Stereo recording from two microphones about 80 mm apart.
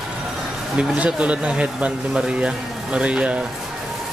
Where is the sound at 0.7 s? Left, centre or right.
Centre.